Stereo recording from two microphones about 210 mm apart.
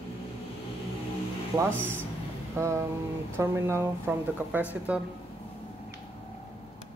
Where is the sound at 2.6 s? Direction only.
15° right (ahead or behind).